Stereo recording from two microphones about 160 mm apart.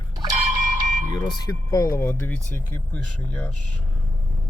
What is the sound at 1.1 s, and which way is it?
Speech, 20° left (ahead or behind).